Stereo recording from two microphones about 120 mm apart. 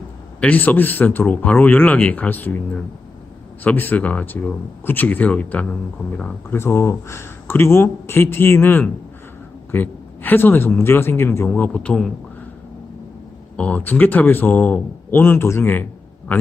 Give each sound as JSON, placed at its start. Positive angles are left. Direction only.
{"t": 0.3, "sound": "speech", "side_deg": 10}
{"t": 3.6, "sound": "speech", "side_deg": 15}
{"t": 13.6, "sound": "speech", "side_deg": 10}